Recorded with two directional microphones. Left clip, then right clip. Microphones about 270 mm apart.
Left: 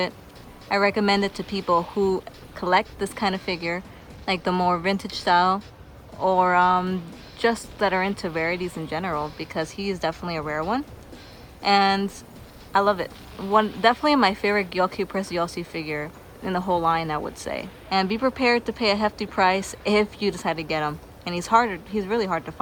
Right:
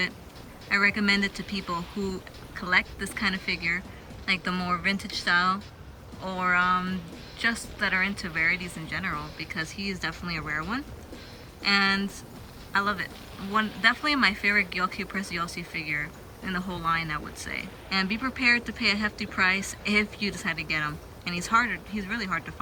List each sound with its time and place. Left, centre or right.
0.7 s speech: centre
1.8 s speech: centre
2.6 s speech: centre